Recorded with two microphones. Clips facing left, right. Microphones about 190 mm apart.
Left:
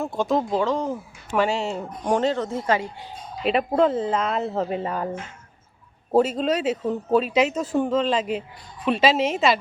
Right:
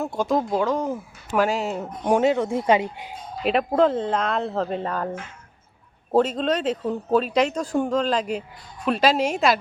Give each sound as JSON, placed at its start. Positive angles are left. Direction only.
{"t": 0.0, "sound": "a man's voice", "side_deg": 0}
{"t": 3.4, "sound": "a man's voice", "side_deg": 0}